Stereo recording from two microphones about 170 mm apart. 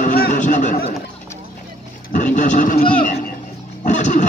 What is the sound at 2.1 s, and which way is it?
Speech, 50° left (ahead or behind).